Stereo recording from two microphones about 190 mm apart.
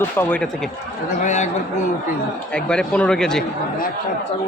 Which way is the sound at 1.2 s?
40° left (ahead or behind).